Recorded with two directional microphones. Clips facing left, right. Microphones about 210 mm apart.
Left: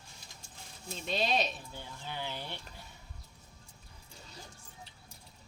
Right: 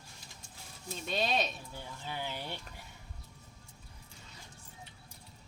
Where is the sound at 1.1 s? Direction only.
Centre (ahead or behind).